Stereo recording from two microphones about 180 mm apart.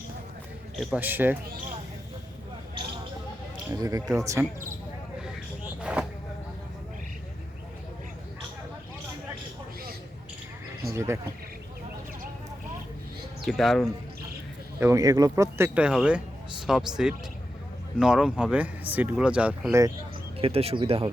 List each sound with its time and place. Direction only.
0.8 s speech: centre (ahead or behind)
1.0 s speech: 10° right (ahead or behind)
3.7 s speech: 20° right (ahead or behind)
5.8 s vehicle: 5° right (ahead or behind)
10.9 s speech: 15° right (ahead or behind)
13.4 s speech: centre (ahead or behind)
14.8 s speech: 15° right (ahead or behind)
20.4 s speech: 35° right (ahead or behind)